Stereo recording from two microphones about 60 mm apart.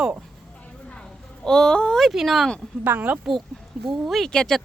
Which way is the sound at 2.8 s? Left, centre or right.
Right.